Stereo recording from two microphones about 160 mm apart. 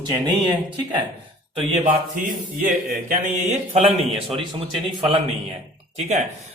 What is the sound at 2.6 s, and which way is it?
Speech, 55° right (ahead or behind).